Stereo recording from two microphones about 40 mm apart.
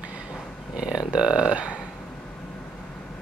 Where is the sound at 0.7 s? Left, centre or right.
Right.